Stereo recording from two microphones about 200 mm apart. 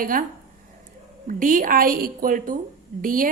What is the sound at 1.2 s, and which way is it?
A woman's voice, 40° right (ahead or behind).